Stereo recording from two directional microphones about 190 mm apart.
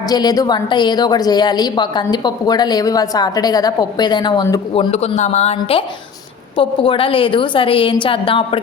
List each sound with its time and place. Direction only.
0.1 s a woman's voice: 20° left (ahead or behind)
4.7 s a woman's voice: 30° left (ahead or behind)